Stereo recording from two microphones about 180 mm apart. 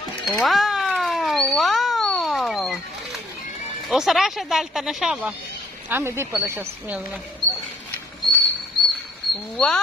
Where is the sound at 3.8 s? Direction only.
Centre (ahead or behind).